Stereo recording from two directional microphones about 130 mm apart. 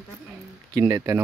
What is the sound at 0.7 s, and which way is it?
Speech, 25° right (ahead or behind).